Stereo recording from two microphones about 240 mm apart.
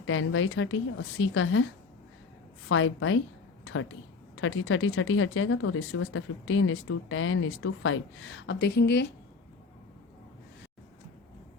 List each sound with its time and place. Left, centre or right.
0.0 s speech: left
2.6 s speech: left
3.6 s a sound: left
4.4 s speech: left